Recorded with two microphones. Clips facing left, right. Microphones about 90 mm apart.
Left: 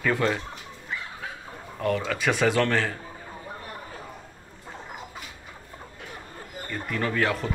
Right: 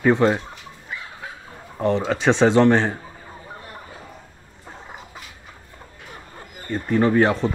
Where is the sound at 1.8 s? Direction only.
25° right (ahead or behind).